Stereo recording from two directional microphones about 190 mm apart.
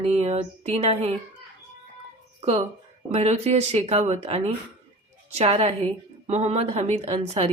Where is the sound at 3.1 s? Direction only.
35° right (ahead or behind).